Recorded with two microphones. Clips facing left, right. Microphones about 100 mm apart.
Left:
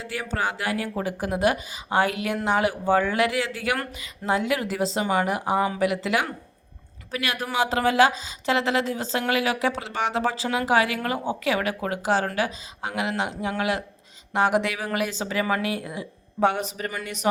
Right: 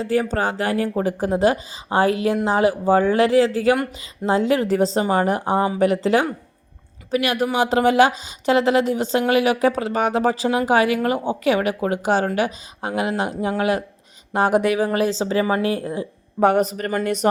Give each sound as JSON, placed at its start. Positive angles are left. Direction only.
{"t": 0.0, "sound": "a woman's voice", "side_deg": -40}